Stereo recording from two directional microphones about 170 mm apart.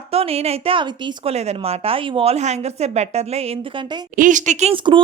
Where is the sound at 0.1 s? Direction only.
35° right (ahead or behind).